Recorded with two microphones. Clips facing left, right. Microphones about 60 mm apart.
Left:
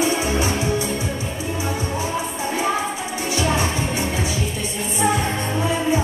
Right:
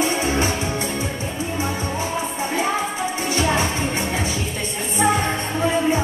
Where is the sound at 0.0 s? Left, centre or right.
Right.